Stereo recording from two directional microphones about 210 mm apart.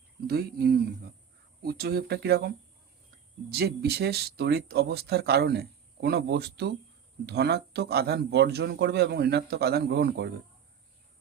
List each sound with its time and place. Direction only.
0.3 s speech: 50° right (ahead or behind)
3.5 s speech: 50° right (ahead or behind)